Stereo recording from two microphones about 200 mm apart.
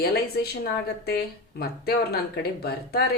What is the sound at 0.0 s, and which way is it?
A woman's voice, 50° left (ahead or behind).